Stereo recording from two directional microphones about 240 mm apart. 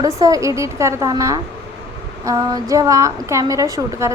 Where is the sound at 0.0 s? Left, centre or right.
Centre.